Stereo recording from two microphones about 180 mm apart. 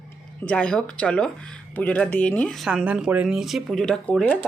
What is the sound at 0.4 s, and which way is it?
Speech, 5° left (ahead or behind).